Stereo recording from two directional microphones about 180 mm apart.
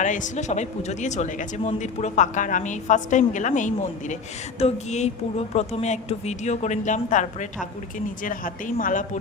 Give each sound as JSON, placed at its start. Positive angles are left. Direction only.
{"t": 0.0, "sound": "a woman's voice", "side_deg": 45}